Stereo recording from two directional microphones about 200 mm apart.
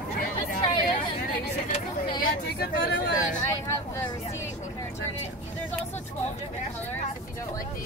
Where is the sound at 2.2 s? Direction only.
45° left (ahead or behind).